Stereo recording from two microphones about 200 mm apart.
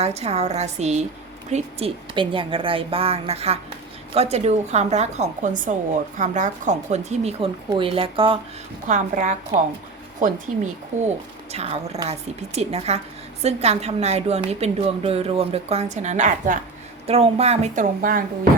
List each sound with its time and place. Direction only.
0.0 s a woman's voice: 35° right (ahead or behind)
8.9 s a woman's voice: 40° right (ahead or behind)